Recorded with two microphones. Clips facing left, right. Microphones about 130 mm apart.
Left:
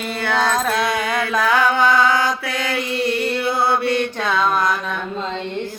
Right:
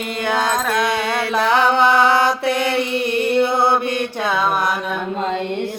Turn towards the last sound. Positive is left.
turn(degrees=-20)  # may be behind; listen again after turning